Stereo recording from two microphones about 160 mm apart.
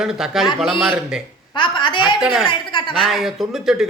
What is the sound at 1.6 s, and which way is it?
A woman's voice, 30° left (ahead or behind).